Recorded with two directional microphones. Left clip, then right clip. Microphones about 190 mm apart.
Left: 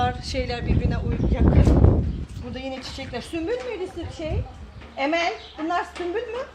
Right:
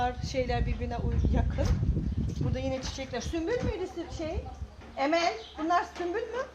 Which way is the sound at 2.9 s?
15° right (ahead or behind).